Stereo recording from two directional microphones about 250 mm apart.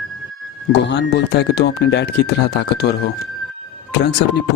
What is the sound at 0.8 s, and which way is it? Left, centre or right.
Speech, left.